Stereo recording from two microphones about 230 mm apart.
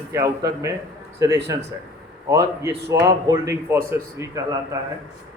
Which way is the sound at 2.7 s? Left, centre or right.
Right.